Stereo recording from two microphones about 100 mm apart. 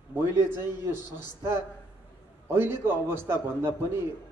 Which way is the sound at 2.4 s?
25° right (ahead or behind).